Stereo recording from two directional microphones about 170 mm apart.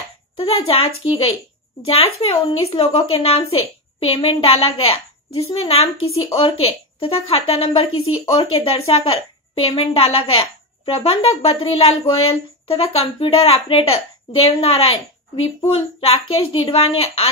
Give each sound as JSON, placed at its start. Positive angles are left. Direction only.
{"t": 0.4, "sound": "speech", "side_deg": 35}